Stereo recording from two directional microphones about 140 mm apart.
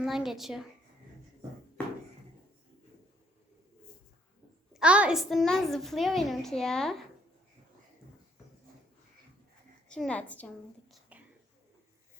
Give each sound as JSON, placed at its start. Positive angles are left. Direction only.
{"t": 0.0, "sound": "a woman's voice", "side_deg": 0}
{"t": 4.7, "sound": "a woman's voice", "side_deg": -10}
{"t": 9.9, "sound": "a woman's voice", "side_deg": 5}